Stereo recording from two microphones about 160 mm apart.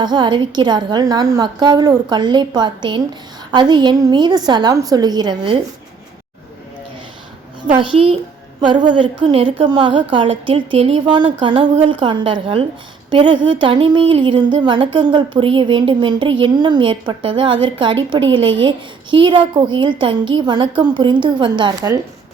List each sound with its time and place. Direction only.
0.0 s a woman's voice: 25° right (ahead or behind)
7.7 s a woman's voice: 30° right (ahead or behind)